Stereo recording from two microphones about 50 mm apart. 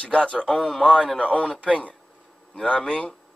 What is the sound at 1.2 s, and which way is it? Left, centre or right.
Speech, right.